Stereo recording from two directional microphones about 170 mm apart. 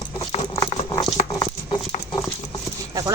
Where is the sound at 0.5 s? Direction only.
25° left (ahead or behind).